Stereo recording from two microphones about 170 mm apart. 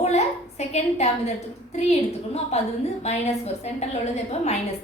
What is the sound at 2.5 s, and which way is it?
A woman's voice, 40° left (ahead or behind).